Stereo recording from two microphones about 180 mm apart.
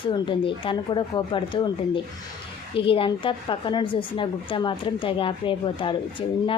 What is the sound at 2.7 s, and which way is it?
A woman's voice, 30° left (ahead or behind).